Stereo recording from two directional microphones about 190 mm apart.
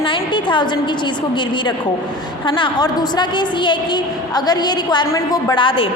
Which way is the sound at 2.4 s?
25° left (ahead or behind).